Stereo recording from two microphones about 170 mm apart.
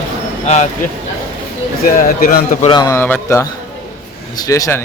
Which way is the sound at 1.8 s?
55° left (ahead or behind).